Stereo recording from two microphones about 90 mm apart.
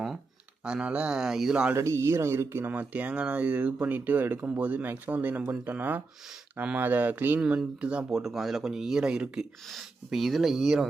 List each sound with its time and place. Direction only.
0.6 s speech: 10° right (ahead or behind)
1.7 s speech: 30° right (ahead or behind); by 8.0 s 15° right (ahead or behind)
8.1 s speech: centre (ahead or behind)